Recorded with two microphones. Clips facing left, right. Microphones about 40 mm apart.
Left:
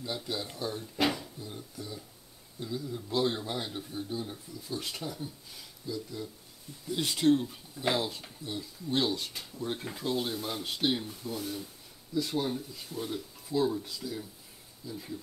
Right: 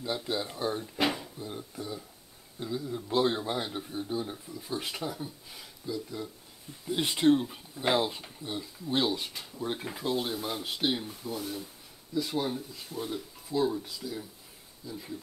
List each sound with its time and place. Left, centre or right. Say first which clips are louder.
0.0 s a man's voice: right 3 dB; centre
0.9 s drawer open or close: left 3 dB; centre
1.4 s a man's voice: right 4 dB; right; by 15.1 s centre